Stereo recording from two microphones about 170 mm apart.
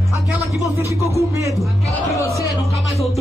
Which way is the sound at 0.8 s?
20° right (ahead or behind).